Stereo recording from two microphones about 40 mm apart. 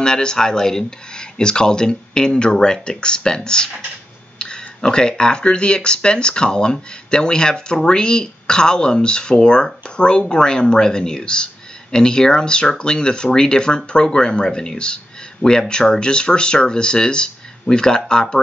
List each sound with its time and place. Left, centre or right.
0.0 s speech: centre